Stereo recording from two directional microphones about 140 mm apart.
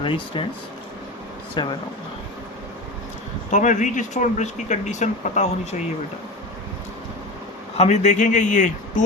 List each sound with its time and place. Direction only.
0.0 s speech: 40° left (ahead or behind)
1.6 s speech: 35° left (ahead or behind)
3.5 s speech: 60° left (ahead or behind)
7.8 s speech: 55° left (ahead or behind)